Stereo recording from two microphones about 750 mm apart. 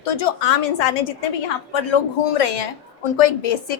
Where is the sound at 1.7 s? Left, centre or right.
Left.